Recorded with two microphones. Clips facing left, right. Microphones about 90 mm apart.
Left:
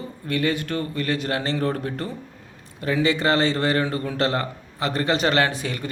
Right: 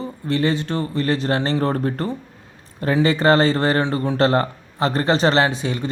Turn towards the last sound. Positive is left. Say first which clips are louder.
# right 3 dB
turn(degrees=-20)  # may be behind; listen again after turning